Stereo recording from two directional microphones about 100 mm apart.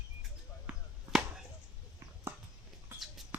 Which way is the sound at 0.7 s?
10° right (ahead or behind).